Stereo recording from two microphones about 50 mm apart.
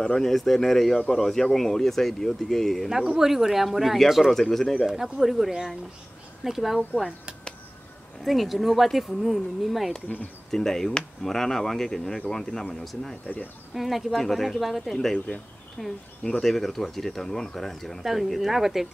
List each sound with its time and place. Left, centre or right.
0.2 s speech: centre
3.2 s speech: centre
4.8 s speech: centre
8.2 s speech: centre
10.0 s speech: left
10.5 s speech: centre
13.3 s speech: left
13.7 s speech: centre
15.3 s speech: left
15.8 s speech: centre
18.0 s speech: centre